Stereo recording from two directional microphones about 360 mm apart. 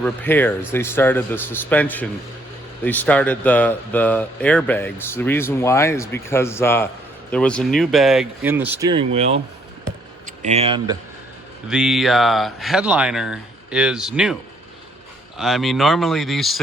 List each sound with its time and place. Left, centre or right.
0.0 s speech: centre
11.7 s speech: centre
15.4 s speech: centre